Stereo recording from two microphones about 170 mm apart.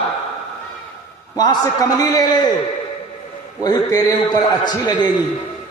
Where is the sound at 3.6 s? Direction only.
20° left (ahead or behind).